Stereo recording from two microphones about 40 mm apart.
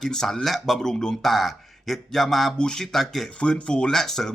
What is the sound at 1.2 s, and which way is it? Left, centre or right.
Speech, centre.